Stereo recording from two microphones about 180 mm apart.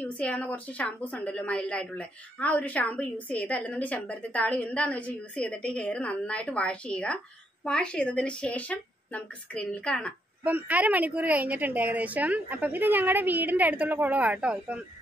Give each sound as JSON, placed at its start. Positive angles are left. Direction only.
{"t": 0.0, "sound": "a woman's voice", "side_deg": 5}
{"t": 10.4, "sound": "a woman's voice", "side_deg": -10}